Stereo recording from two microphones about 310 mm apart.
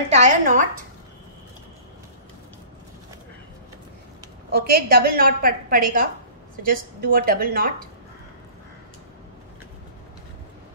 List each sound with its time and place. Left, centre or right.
0.1 s a woman's voice: right
4.5 s a woman's voice: right